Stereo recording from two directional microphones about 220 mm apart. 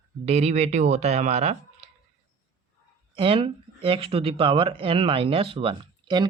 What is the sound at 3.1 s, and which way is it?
Speech, 25° right (ahead or behind).